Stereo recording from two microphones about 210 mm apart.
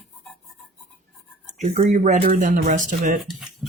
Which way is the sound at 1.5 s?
35° right (ahead or behind).